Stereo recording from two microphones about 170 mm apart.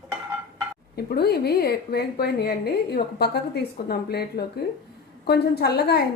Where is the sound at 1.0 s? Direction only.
70° left (ahead or behind).